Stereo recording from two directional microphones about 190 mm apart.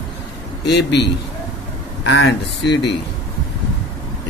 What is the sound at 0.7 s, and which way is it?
Speech, 60° left (ahead or behind).